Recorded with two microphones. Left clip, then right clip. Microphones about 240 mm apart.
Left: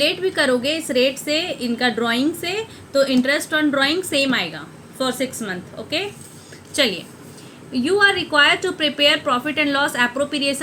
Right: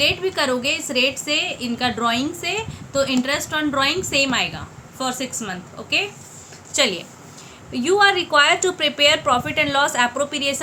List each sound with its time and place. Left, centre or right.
0.0 s a woman's voice: centre
6.7 s a woman's voice: centre